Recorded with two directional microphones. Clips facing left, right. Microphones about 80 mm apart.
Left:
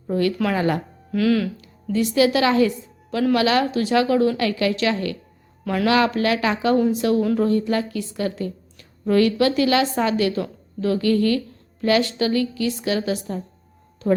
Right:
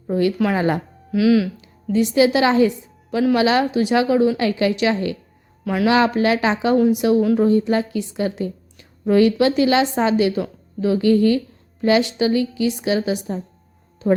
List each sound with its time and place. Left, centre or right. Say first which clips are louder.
0.1 s a woman's voice: right 2 dB; centre
1.1 s speech: right 4 dB; centre
1.5 s a woman's voice: right 3 dB; right
5.6 s speech: right 2 dB; centre
5.9 s a woman's voice: right 2 dB; right